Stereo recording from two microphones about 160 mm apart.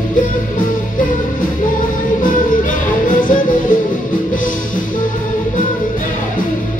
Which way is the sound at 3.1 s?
55° left (ahead or behind).